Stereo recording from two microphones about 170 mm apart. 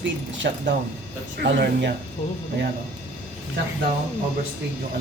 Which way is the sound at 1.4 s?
65° right (ahead or behind).